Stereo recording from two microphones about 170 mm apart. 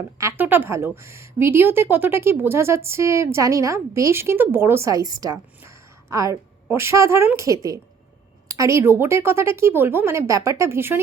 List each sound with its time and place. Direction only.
0.2 s speech: 15° right (ahead or behind)